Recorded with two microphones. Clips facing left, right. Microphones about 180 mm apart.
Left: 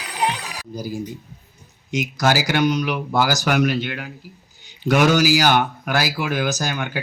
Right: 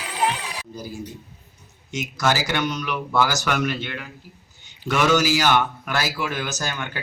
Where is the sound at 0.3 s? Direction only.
40° left (ahead or behind).